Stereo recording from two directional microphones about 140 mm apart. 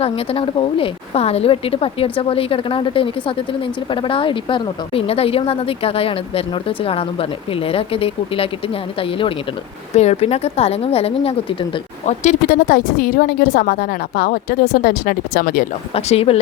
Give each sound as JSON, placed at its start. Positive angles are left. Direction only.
{"t": 0.0, "sound": "a woman's voice", "side_deg": 45}
{"t": 9.9, "sound": "speech", "side_deg": 50}
{"t": 12.0, "sound": "a woman's voice", "side_deg": 60}
{"t": 16.0, "sound": "speech", "side_deg": 50}